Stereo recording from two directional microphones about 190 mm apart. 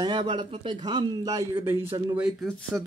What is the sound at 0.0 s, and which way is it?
A man's voice, 25° right (ahead or behind).